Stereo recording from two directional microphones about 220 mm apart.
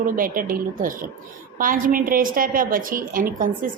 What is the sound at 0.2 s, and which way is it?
A woman's voice, 40° right (ahead or behind).